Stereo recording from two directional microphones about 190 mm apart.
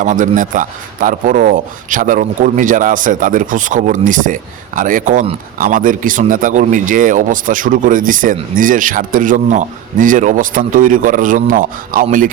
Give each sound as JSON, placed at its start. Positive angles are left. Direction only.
{"t": 0.0, "sound": "a man's voice", "side_deg": -40}